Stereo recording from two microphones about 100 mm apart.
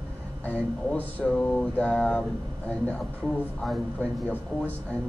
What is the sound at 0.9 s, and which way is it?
Speech, 15° left (ahead or behind).